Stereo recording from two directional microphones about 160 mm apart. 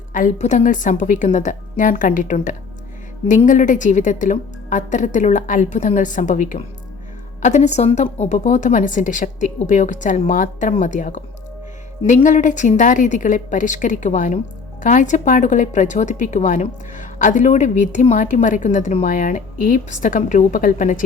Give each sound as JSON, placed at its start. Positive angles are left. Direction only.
{"t": 0.1, "sound": "a woman's voice", "side_deg": 55}